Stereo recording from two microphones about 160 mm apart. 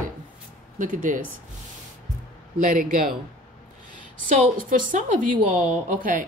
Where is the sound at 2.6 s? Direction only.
60° right (ahead or behind).